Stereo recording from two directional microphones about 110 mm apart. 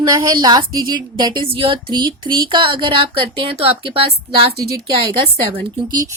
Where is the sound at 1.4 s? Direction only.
55° right (ahead or behind).